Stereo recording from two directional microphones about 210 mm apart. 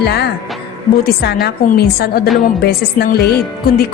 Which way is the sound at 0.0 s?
50° left (ahead or behind).